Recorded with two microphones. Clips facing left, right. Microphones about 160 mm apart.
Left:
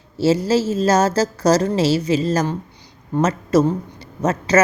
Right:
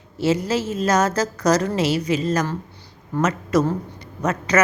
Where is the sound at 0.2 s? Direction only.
30° left (ahead or behind).